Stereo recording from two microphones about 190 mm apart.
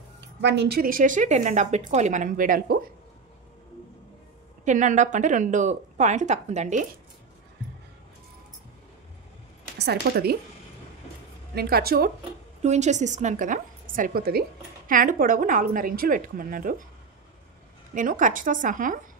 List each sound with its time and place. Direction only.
0.2 s speech: 65° right (ahead or behind); by 2.8 s 45° right (ahead or behind)
4.6 s a woman's voice: 40° right (ahead or behind)
9.8 s a woman's voice: 55° right (ahead or behind)
11.5 s speech: 55° right (ahead or behind)
12.6 s a woman's voice: 35° right (ahead or behind)
17.9 s speech: 45° right (ahead or behind)